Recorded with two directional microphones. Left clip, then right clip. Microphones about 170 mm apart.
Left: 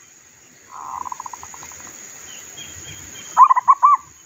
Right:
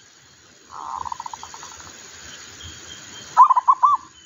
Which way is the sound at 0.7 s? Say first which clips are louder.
Even; 20° left (ahead or behind).